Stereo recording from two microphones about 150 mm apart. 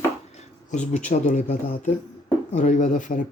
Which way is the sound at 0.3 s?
50° left (ahead or behind).